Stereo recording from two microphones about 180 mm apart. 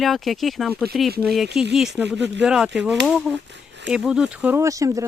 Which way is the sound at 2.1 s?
75° right (ahead or behind).